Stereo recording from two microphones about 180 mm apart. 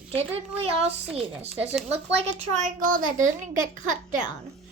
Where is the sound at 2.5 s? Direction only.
45° right (ahead or behind).